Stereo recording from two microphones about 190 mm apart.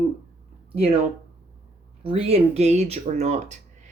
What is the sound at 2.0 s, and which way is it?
Speech, 30° right (ahead or behind).